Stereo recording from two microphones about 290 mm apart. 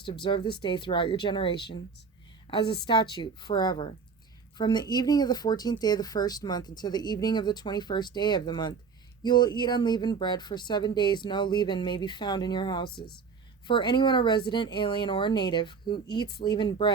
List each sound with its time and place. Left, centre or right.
0.0 s a woman's voice: centre